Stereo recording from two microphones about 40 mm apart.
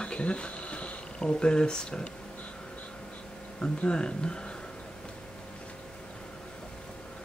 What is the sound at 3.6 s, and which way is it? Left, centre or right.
Speech, left.